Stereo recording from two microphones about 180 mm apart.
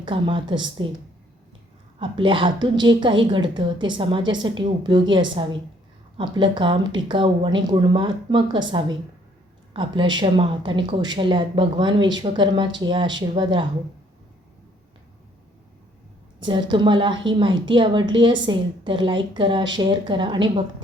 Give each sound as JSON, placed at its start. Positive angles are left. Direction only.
{"t": 0.0, "sound": "a woman's voice", "side_deg": -25}
{"t": 2.0, "sound": "a woman's voice", "side_deg": -30}
{"t": 9.7, "sound": "a woman's voice", "side_deg": -25}
{"t": 16.4, "sound": "a woman's voice", "side_deg": -25}